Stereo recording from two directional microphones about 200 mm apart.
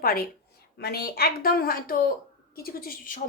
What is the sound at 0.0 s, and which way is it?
A woman's voice, 45° left (ahead or behind).